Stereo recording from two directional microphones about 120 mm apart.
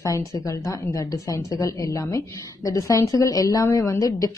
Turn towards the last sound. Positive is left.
turn(degrees=30)  # may be behind; listen again after turning